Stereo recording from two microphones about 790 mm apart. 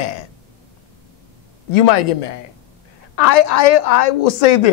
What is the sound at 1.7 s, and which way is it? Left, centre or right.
Speech, left.